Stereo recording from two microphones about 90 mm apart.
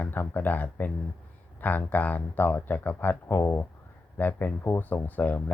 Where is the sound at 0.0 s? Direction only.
20° left (ahead or behind).